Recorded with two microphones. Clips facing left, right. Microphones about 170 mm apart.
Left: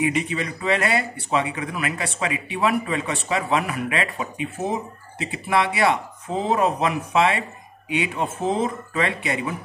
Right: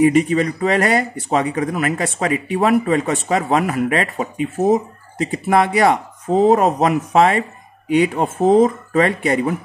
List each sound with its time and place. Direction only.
0.0 s speech: 45° right (ahead or behind)